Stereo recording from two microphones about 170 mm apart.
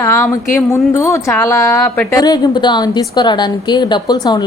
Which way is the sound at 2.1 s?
25° left (ahead or behind).